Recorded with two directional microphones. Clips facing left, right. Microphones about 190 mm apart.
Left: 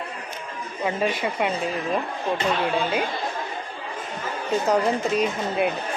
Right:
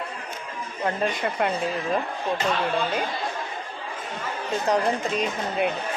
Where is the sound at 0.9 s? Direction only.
5° left (ahead or behind).